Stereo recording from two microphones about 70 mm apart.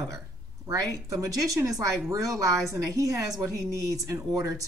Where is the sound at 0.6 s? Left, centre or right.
Right.